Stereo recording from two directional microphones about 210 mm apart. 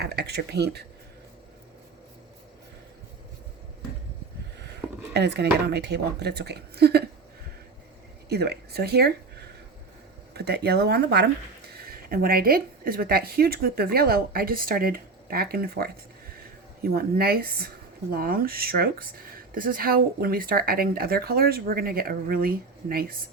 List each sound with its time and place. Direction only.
0.0 s speech: 50° right (ahead or behind)
5.1 s speech: 50° right (ahead or behind)
8.3 s speech: 50° right (ahead or behind)
10.3 s speech: 50° right (ahead or behind)